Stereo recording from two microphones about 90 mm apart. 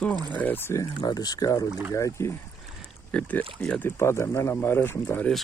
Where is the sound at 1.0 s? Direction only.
50° left (ahead or behind).